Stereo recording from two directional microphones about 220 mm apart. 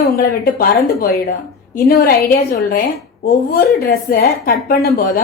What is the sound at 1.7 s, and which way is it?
Speech, 40° left (ahead or behind).